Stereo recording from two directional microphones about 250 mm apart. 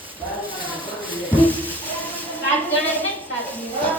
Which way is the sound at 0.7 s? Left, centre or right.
Centre.